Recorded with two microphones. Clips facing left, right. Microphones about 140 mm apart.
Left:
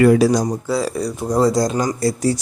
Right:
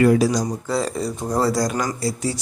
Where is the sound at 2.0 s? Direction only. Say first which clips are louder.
Left 6 dB; 40° left (ahead or behind).